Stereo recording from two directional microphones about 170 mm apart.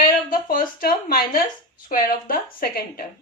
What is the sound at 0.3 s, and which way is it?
Speech, 55° left (ahead or behind).